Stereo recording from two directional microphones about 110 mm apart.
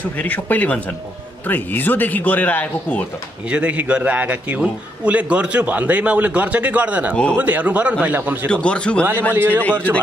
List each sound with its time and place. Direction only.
0.2 s speech: 15° left (ahead or behind)
3.4 s a man's voice: 10° right (ahead or behind)
8.5 s speech: 10° left (ahead or behind)